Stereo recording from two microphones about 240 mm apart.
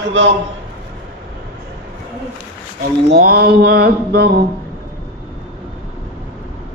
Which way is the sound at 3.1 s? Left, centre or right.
Right.